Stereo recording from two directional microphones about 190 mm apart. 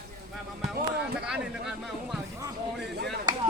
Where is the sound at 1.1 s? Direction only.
5° right (ahead or behind).